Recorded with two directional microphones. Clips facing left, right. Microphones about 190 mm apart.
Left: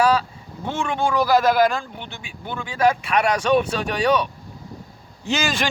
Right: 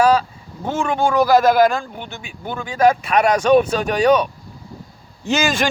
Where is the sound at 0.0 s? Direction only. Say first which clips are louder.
Right 4 dB; 45° right (ahead or behind).